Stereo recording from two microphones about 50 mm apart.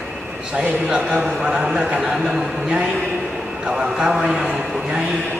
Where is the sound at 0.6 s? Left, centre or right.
Centre.